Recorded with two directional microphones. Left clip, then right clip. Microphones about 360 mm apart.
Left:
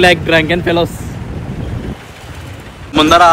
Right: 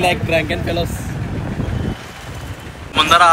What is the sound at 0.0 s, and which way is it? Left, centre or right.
Speech, left.